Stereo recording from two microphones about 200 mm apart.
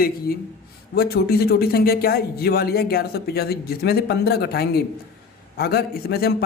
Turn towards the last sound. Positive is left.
turn(degrees=50)  # may be behind; listen again after turning